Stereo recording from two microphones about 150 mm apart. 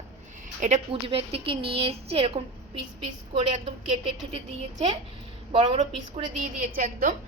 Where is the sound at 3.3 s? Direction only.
45° right (ahead or behind).